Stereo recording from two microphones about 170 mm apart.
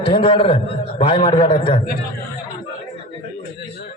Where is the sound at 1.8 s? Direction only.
55° left (ahead or behind).